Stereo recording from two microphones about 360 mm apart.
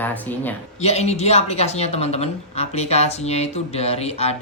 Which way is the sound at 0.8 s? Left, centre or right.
Centre.